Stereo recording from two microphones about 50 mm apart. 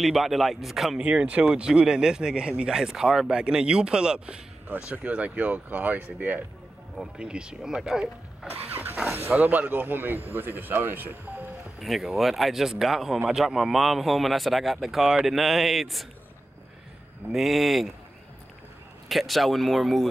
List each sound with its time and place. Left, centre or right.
0.0 s speech: centre
1.0 s speech: right
7.0 s speech: centre
8.5 s vehicle: right
9.3 s speech: right
11.8 s speech: centre
17.3 s speech: centre
19.0 s speech: centre